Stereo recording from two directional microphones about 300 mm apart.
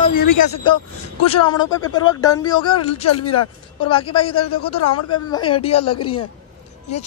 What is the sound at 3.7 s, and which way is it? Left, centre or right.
Speech, centre.